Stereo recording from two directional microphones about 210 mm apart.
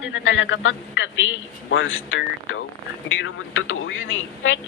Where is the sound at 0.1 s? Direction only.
65° left (ahead or behind).